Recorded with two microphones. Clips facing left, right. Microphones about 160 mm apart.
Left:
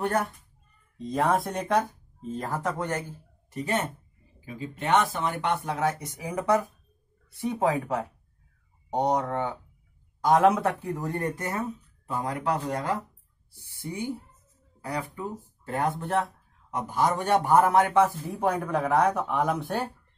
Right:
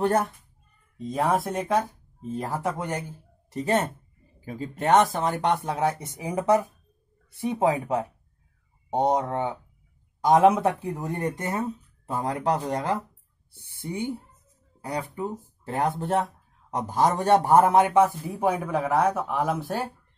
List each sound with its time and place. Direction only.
0.0 s speech: 25° right (ahead or behind)
0.9 s speech: 10° right (ahead or behind)
3.5 s a man's voice: 40° right (ahead or behind)
5.9 s speech: 20° right (ahead or behind)
16.7 s a man's voice: 35° right (ahead or behind); by 18.3 s 15° right (ahead or behind)
18.3 s speech: 5° right (ahead or behind)